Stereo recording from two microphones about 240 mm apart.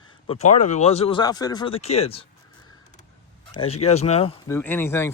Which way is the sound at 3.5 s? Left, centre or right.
Left.